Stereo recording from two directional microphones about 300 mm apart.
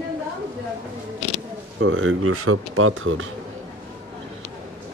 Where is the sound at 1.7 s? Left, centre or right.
Right.